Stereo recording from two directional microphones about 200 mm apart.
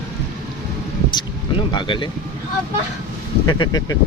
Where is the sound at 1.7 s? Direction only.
25° left (ahead or behind).